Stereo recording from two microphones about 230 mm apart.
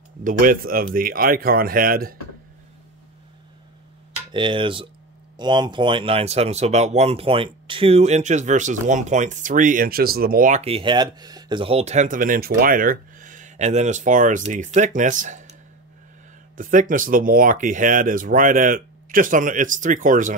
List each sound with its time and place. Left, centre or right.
0.2 s speech: right
4.3 s speech: right
16.5 s speech: right